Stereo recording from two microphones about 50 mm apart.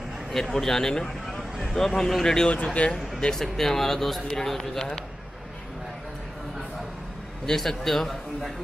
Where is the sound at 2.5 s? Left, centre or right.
Left.